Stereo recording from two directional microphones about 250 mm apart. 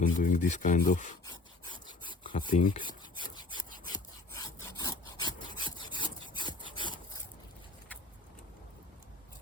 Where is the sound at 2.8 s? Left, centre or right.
Centre.